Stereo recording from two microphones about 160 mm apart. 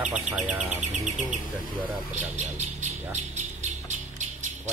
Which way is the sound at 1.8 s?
10° right (ahead or behind).